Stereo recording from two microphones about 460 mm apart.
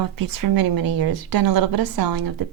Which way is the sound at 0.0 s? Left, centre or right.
Right.